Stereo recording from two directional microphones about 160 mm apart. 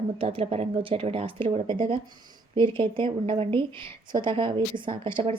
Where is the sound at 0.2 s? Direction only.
35° right (ahead or behind).